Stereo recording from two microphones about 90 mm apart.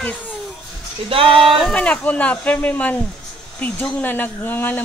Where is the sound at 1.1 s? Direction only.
80° right.